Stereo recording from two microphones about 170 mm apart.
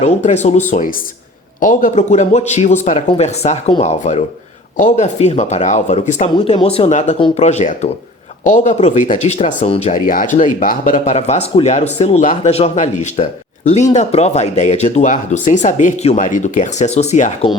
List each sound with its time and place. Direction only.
0.0 s speech: 45° left (ahead or behind)